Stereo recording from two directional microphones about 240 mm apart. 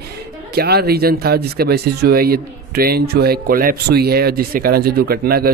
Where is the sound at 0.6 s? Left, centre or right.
Right.